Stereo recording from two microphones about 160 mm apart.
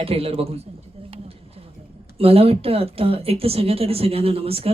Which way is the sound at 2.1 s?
35° right (ahead or behind).